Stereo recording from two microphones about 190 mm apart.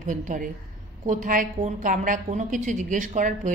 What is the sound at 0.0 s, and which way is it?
A woman's voice, 40° right (ahead or behind).